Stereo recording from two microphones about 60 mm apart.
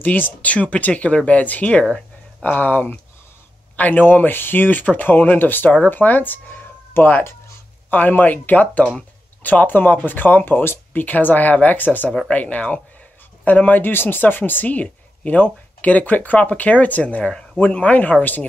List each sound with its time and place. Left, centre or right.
0.0 s speech: left
2.4 s speech: left